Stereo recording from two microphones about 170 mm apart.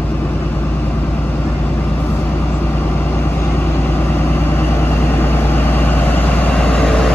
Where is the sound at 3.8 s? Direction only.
10° left (ahead or behind).